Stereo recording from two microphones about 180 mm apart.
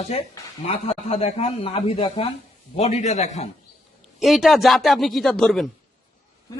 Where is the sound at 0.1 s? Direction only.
35° left (ahead or behind).